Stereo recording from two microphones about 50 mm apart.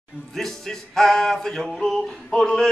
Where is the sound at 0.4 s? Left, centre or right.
Centre.